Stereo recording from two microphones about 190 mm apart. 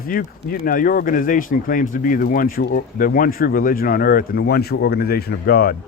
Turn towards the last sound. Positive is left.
turn(degrees=55)  # may be behind; listen again after turning